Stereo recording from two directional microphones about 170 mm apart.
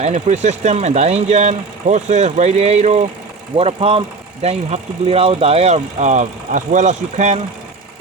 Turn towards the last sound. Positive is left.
turn(degrees=-45)  # may be behind; listen again after turning